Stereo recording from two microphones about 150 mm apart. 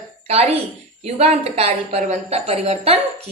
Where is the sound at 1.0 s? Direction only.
45° right (ahead or behind).